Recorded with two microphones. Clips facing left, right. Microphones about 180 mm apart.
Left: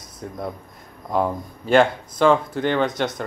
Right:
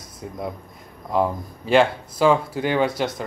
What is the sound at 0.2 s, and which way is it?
Speech, 5° right (ahead or behind).